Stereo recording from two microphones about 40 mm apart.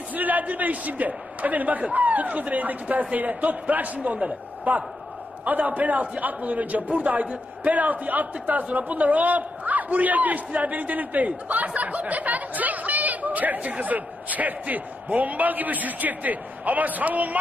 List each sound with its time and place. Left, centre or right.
0.1 s a man's voice: right